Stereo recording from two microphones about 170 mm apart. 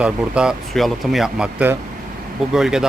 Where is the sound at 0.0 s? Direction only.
5° right (ahead or behind).